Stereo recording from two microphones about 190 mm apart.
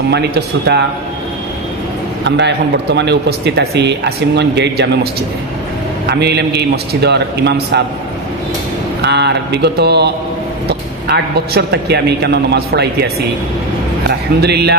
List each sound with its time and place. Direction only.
0.1 s a man's voice: 60° right (ahead or behind)
2.2 s a man's voice: 65° right (ahead or behind)
6.0 s a man's voice: 60° right (ahead or behind)
9.0 s a man's voice: 65° right (ahead or behind)